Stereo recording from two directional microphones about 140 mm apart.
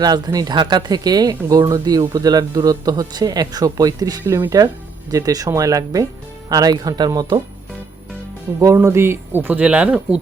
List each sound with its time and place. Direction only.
0.0 s a man's voice: 25° right (ahead or behind)
8.6 s speech: 20° right (ahead or behind)